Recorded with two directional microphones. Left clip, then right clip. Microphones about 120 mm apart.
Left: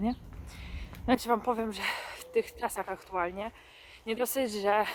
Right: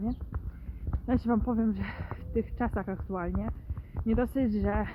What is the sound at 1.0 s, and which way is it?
Speech, 50° left (ahead or behind).